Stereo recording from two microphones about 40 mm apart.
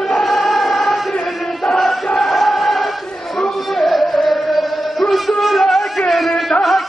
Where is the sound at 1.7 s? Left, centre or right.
Centre.